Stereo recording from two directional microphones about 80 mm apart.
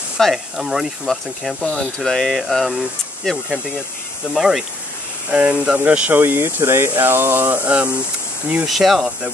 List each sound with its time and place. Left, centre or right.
0.2 s speech: centre
1.7 s speech: centre
4.3 s speech: centre; by 7.9 s right
8.6 s speech: centre